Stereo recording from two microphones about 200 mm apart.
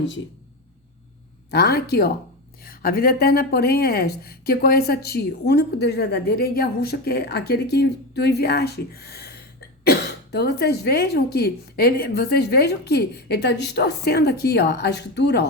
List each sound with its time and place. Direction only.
1.5 s a woman's voice: 50° left (ahead or behind)